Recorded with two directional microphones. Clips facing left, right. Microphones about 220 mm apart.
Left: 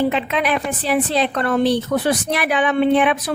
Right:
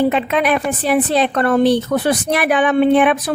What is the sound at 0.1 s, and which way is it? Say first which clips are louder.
Speech: right 4 dB; 50° right (ahead or behind).